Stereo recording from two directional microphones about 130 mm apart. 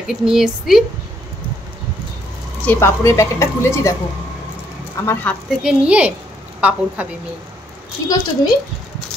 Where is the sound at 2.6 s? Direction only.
20° left (ahead or behind).